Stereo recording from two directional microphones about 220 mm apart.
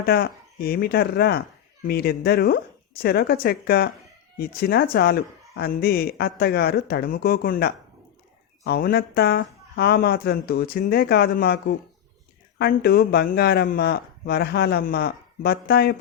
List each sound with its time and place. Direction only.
0.0 s speech: 45° left (ahead or behind)